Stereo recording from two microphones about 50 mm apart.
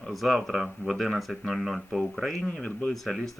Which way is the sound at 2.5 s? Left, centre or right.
Centre.